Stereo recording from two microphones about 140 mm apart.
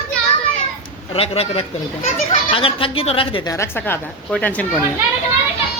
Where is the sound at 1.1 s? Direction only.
45° left (ahead or behind).